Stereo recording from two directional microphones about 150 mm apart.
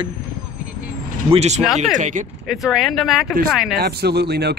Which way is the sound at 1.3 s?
45° right (ahead or behind).